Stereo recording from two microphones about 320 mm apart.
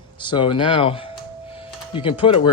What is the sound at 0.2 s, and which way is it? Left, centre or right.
A man's voice, centre.